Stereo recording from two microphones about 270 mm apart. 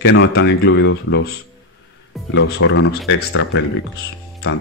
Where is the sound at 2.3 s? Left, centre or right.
Left.